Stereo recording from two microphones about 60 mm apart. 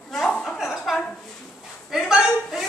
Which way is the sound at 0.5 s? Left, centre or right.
Centre.